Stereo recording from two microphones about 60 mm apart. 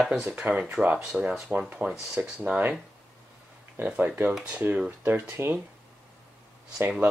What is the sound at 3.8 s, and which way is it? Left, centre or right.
Speech, right.